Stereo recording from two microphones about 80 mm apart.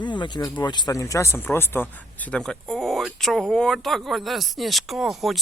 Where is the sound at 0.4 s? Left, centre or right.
Left.